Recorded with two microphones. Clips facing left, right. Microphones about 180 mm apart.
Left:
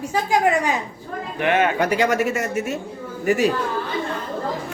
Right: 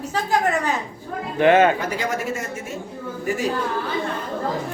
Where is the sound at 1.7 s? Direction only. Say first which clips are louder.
Left 6 dB; 75° left (ahead or behind).